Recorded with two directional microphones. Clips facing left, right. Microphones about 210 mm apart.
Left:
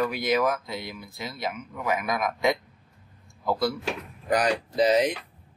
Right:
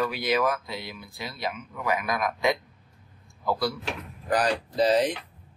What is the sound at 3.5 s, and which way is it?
Speech, 20° left (ahead or behind).